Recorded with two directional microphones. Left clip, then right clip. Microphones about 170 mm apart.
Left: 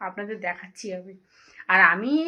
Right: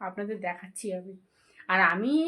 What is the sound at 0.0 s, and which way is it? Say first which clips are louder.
A woman's voice: left 3 dB; centre (ahead or behind).